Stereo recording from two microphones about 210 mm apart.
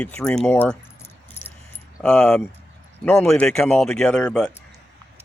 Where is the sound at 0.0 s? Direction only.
5° left (ahead or behind).